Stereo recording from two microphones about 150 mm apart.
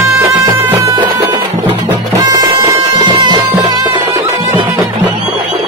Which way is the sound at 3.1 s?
30° right (ahead or behind).